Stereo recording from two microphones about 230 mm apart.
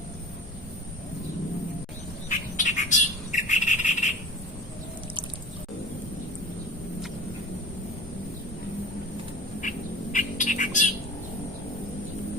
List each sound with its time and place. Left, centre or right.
2.3 s bird: left
9.6 s bird: left